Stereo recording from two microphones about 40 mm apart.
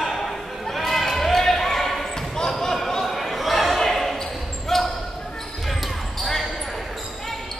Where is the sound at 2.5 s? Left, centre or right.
Centre.